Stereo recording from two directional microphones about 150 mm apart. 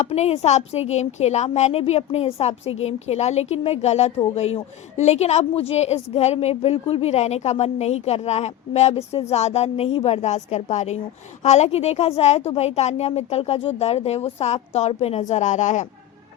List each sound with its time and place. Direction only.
0.1 s a woman's voice: 45° left (ahead or behind)